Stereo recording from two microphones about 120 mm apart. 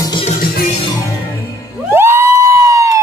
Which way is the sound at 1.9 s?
20° right (ahead or behind).